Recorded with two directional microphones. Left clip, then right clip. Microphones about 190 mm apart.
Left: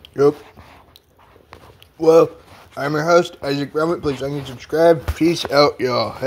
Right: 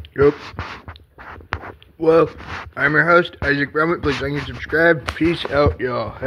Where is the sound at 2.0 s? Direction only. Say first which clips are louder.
Left 2 dB; 10° right (ahead or behind).